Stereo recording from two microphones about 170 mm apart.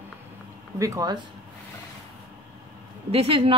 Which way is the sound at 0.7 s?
20° right (ahead or behind).